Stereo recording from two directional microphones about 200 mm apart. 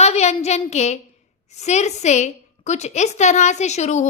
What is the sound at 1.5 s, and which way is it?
A woman's voice, 35° left (ahead or behind).